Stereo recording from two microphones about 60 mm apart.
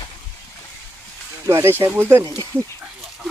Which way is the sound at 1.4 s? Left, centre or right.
Right.